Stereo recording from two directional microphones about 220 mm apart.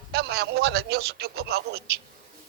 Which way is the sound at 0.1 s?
45° right (ahead or behind).